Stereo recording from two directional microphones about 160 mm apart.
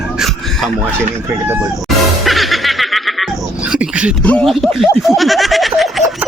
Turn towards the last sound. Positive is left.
turn(degrees=0)  # may be behind; listen again after turning